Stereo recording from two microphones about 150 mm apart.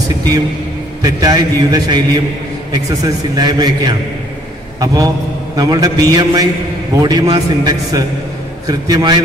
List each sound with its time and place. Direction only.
1.0 s a man's voice: 25° right (ahead or behind)